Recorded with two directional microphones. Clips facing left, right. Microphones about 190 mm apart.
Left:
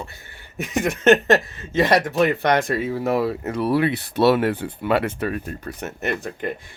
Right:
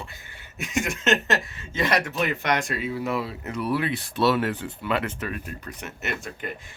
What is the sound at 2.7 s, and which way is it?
Speech, 40° left (ahead or behind).